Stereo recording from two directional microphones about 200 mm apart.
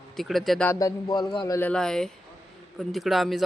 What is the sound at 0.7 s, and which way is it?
Speech, 20° left (ahead or behind).